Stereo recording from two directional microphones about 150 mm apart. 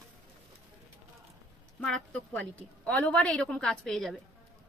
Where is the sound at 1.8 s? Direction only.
5° left (ahead or behind).